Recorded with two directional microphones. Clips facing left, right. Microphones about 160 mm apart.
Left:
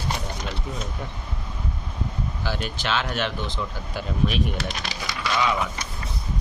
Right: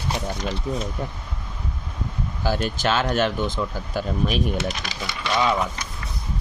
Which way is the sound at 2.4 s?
45° right (ahead or behind).